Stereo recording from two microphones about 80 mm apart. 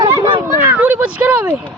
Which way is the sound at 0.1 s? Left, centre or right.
Right.